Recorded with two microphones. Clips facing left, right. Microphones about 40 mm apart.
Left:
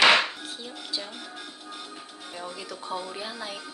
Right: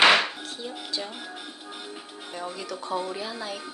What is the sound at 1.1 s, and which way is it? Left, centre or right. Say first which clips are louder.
Music: right 2 dB; centre.